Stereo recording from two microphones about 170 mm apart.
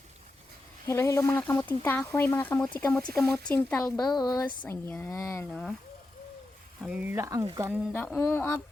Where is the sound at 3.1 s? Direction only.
5° left (ahead or behind).